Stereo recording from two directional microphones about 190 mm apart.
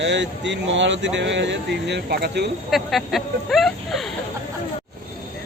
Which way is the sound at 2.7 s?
Centre (ahead or behind).